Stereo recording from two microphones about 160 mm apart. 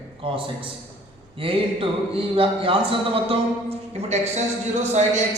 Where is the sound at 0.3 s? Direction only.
35° right (ahead or behind).